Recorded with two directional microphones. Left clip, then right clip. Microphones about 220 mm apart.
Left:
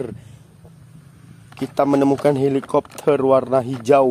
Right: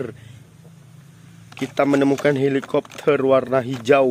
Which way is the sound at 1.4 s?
10° left (ahead or behind).